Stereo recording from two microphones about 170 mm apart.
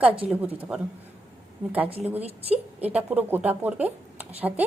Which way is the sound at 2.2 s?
35° right (ahead or behind).